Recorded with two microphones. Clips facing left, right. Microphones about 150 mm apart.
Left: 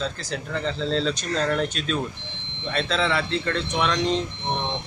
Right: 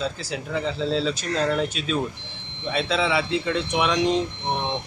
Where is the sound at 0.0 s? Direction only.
5° right (ahead or behind).